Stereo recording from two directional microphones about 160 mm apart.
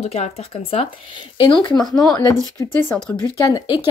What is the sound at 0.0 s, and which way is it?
Speech, 40° left (ahead or behind).